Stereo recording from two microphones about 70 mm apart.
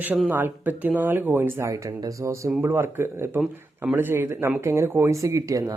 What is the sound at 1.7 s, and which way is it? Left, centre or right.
A man's voice, right.